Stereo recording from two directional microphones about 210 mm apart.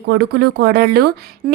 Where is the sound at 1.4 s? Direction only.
40° right (ahead or behind).